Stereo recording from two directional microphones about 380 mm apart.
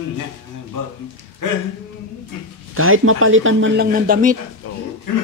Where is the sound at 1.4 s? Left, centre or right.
Left.